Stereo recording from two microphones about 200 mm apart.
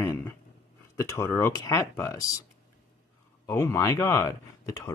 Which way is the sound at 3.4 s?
15° left (ahead or behind).